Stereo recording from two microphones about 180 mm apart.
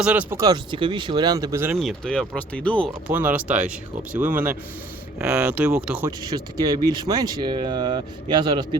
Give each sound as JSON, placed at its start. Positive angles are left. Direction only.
{"t": 0.0, "sound": "speech", "side_deg": -5}
{"t": 1.7, "sound": "speech", "side_deg": 0}
{"t": 3.1, "sound": "speech", "side_deg": -10}
{"t": 5.2, "sound": "speech", "side_deg": -10}
{"t": 6.3, "sound": "speech", "side_deg": -20}